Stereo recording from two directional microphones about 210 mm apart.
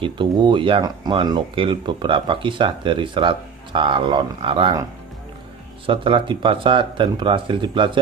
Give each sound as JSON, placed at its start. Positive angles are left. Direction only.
{"t": 0.0, "sound": "speech", "side_deg": -25}
{"t": 5.9, "sound": "speech", "side_deg": -25}